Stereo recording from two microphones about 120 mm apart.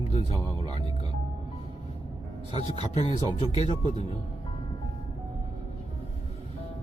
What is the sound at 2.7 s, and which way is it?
Speech, 55° left (ahead or behind).